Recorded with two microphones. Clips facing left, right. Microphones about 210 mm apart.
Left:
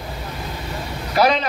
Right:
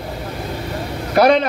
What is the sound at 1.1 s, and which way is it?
Speech, 55° right (ahead or behind).